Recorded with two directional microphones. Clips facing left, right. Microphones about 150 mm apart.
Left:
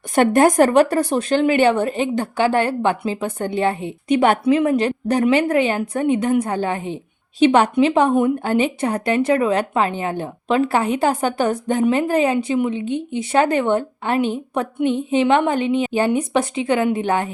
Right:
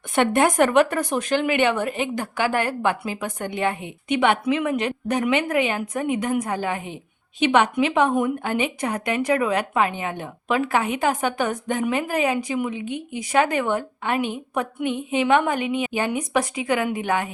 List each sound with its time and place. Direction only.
0.2 s speech: 40° left (ahead or behind)